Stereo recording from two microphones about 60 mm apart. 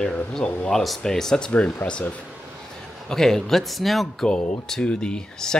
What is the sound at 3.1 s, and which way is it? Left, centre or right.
Speech, centre.